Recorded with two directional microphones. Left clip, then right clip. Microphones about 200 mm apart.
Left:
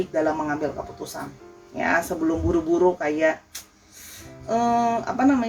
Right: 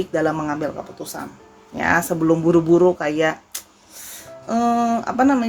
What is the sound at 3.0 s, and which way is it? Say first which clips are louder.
Speech: right 2 dB; 50° right (ahead or behind).